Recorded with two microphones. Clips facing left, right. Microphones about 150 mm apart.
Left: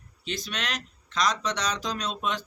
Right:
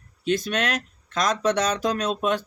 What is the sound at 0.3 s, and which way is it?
Speech, 55° right (ahead or behind).